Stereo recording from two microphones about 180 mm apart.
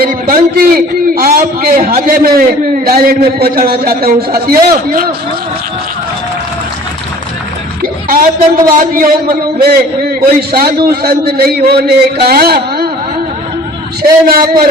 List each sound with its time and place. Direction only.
0.0 s a sound: 50° right (ahead or behind)
1.9 s a man's voice: 50° right (ahead or behind)
7.8 s a man's voice: 50° right (ahead or behind)
14.0 s a man's voice: 55° right (ahead or behind)